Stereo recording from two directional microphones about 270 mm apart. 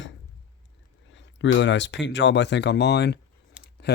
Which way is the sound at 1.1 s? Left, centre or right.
Left.